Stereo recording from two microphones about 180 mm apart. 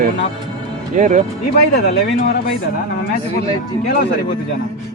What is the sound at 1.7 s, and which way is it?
Speech, 65° left (ahead or behind).